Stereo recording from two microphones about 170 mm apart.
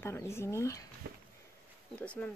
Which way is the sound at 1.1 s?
65° right (ahead or behind).